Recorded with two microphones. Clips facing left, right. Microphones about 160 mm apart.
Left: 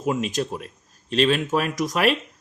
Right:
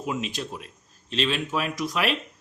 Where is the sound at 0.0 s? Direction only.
45° left (ahead or behind).